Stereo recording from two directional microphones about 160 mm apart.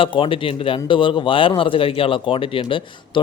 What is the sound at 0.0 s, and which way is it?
A man's voice, 35° left (ahead or behind).